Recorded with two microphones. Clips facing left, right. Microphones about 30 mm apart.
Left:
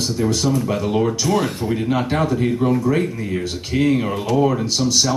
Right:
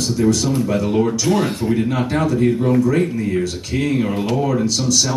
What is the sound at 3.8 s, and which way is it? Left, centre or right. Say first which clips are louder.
Speech: left 1 dB; centre.